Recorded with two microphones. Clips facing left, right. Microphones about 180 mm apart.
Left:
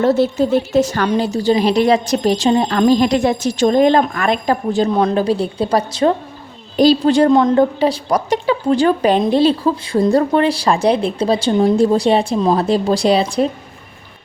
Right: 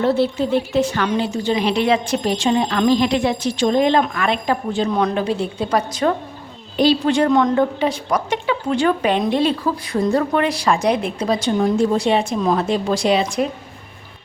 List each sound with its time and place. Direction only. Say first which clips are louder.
0.0 s a woman's voice: left 4 dB; 45° left (ahead or behind)